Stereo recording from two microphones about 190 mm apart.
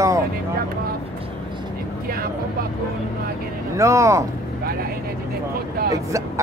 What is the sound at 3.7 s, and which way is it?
Speech, 15° right (ahead or behind).